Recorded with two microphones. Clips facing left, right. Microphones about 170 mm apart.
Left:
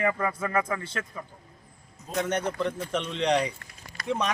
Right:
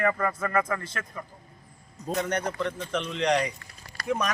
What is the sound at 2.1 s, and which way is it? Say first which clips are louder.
A man's voice: even; 5° left (ahead or behind).